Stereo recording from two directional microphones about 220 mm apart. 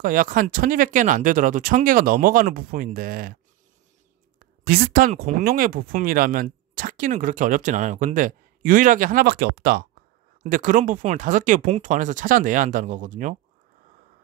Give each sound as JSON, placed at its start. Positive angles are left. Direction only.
{"t": 0.0, "sound": "speech", "side_deg": -40}
{"t": 4.6, "sound": "speech", "side_deg": -40}